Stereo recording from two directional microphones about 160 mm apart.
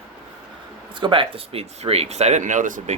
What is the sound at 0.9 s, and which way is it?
Speech, 30° right (ahead or behind).